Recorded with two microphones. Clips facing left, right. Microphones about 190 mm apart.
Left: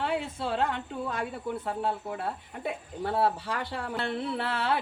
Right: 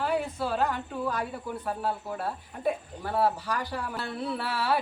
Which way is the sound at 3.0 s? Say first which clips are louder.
Left 1 dB; 25° left (ahead or behind).